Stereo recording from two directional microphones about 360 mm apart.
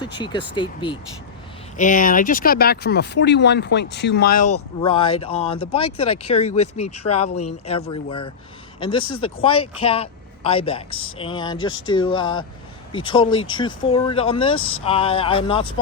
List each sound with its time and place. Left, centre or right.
0.2 s speech: centre
4.8 s speech: centre
9.0 s speech: left
9.6 s speech: centre